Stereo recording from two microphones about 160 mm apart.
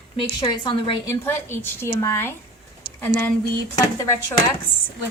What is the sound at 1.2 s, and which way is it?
A woman's voice, 15° left (ahead or behind).